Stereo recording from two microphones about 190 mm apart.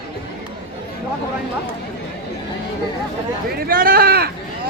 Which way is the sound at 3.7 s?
55° right (ahead or behind).